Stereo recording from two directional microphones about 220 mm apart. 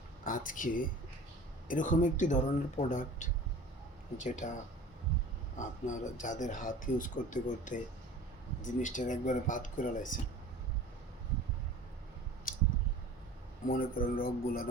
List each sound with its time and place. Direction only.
0.3 s speech: 35° left (ahead or behind)
5.5 s speech: 35° left (ahead or behind)
12.5 s a sound: 40° left (ahead or behind)
13.7 s speech: 40° left (ahead or behind)